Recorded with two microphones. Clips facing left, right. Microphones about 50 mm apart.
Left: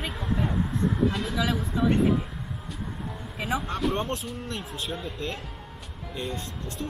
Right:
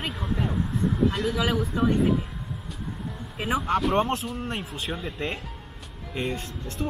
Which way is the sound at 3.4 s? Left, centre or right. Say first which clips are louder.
Right 5 dB; right.